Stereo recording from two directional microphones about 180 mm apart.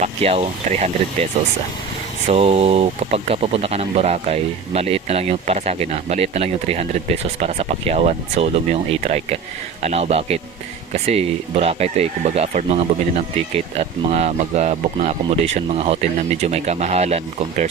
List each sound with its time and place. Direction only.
0.0 s speech: 35° right (ahead or behind)